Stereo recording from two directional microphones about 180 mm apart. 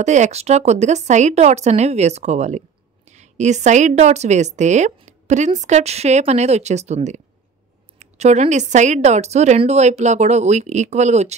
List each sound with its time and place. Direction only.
0.0 s a woman's voice: 40° right (ahead or behind)